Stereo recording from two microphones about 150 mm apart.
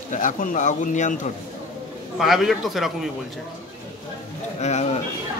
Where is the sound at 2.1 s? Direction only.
Centre (ahead or behind).